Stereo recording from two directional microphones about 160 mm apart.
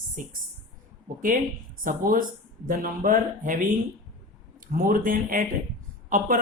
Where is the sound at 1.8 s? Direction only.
60° right (ahead or behind).